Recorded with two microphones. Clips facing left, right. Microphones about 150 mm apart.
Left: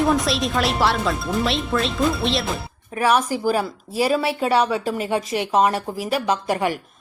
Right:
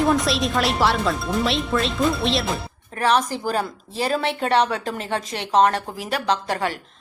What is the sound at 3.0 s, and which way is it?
A woman's voice, 10° left (ahead or behind).